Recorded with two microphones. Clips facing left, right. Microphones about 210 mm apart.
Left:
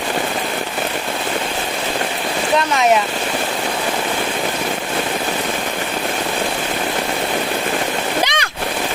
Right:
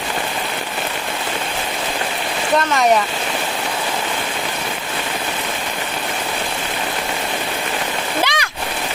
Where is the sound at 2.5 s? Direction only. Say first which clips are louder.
Right 1 dB; centre (ahead or behind).